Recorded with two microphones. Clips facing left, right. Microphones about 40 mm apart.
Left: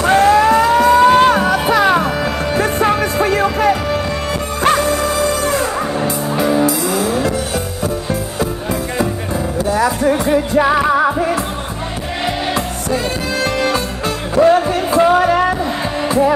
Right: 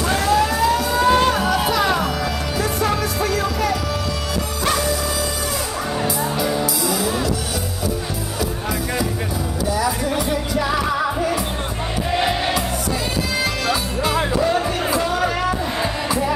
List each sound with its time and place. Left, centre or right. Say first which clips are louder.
0.0 s music: left 7 dB; left
10.1 s music: left 7 dB; left
14.3 s music: left 7 dB; left